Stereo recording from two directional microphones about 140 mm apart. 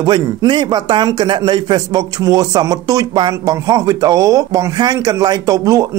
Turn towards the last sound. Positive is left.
turn(degrees=-25)  # may be behind; listen again after turning